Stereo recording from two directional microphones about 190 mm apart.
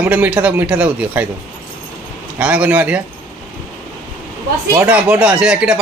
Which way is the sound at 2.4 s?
5° right (ahead or behind).